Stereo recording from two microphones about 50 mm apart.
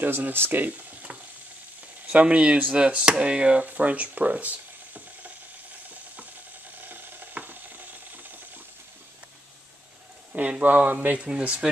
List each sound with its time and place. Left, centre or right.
0.0 s speech: right; by 3.6 s centre
3.6 s stir: right
6.8 s ratchet: right
7.3 s stir: right
10.3 s speech: right
11.1 s speech: right